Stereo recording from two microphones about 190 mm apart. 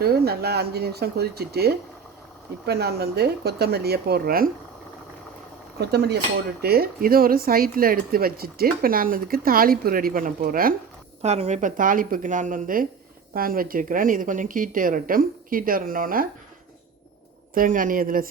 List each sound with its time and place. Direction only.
0.0 s speech: 55° right (ahead or behind)
5.8 s speech: 60° right (ahead or behind)
11.2 s speech: 35° right (ahead or behind)
17.5 s speech: 45° right (ahead or behind)